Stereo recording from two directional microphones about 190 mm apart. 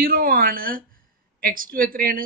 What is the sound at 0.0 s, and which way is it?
A woman's voice, 50° right (ahead or behind).